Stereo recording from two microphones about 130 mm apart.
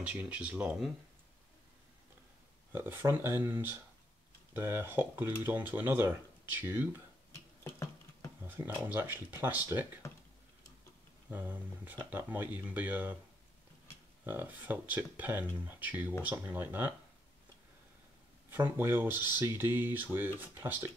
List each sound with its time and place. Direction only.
0.0 s speech: 10° right (ahead or behind)
2.7 s speech: 15° right (ahead or behind)
7.6 s a sound: 25° left (ahead or behind)
8.5 s speech: 15° right (ahead or behind)
11.2 s speech: 15° right (ahead or behind)
14.2 s speech: 15° right (ahead or behind)
18.5 s speech: 15° right (ahead or behind)